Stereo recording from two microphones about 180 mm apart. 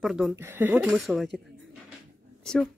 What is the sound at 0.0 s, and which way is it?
Speech, 5° right (ahead or behind).